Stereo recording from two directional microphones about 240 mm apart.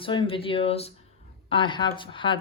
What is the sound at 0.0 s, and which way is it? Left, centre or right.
Speech, left.